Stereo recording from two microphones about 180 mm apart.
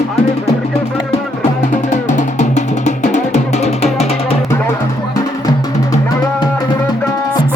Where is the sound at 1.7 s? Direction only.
40° left (ahead or behind).